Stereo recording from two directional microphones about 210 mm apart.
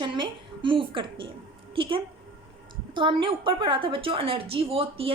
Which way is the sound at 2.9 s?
25° right (ahead or behind).